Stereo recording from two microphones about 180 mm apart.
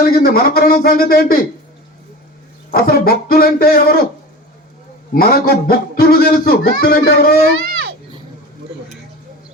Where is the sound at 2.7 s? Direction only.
55° left (ahead or behind).